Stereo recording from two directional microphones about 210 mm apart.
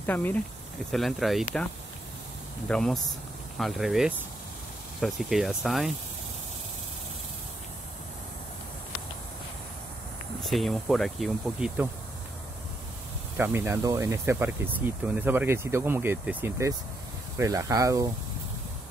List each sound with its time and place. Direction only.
0.0 s speech: 10° left (ahead or behind)
2.7 s speech: centre (ahead or behind)
10.4 s speech: centre (ahead or behind)
13.4 s speech: 10° right (ahead or behind)